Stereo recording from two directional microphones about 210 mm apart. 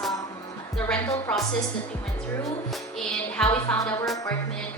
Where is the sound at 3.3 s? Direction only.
5° left (ahead or behind).